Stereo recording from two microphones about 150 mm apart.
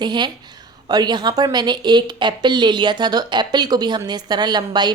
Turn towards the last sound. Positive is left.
turn(degrees=-30)  # may be behind; listen again after turning